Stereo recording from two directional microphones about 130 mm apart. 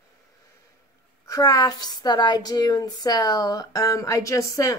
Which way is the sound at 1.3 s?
30° left (ahead or behind).